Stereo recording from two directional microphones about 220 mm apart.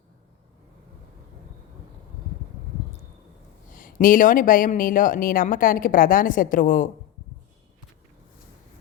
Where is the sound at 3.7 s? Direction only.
40° left (ahead or behind).